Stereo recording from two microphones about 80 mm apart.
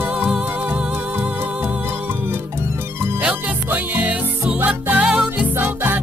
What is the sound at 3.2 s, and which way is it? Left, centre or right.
Music, right.